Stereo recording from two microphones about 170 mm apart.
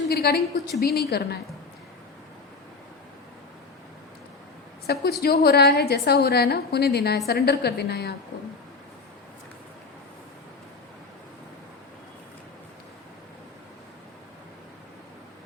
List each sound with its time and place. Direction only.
0.1 s a woman's voice: 65° left (ahead or behind)
4.9 s a woman's voice: 70° left (ahead or behind)